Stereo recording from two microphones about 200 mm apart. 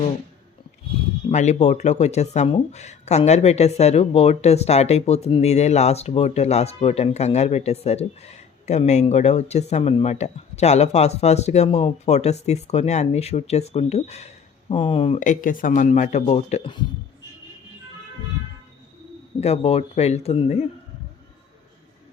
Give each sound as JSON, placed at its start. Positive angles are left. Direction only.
{"t": 1.3, "sound": "speech", "side_deg": 35}
{"t": 19.4, "sound": "speech", "side_deg": 30}